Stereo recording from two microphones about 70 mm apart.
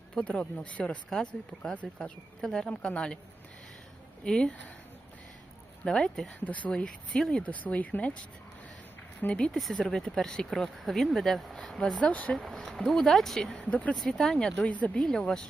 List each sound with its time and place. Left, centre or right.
0.2 s speech: centre
4.2 s speech: centre
5.8 s speech: centre
6.4 s speech: left
9.2 s speech: centre
9.6 s speech: centre
12.3 s speech: centre
13.6 s speech: centre
13.9 s speech: centre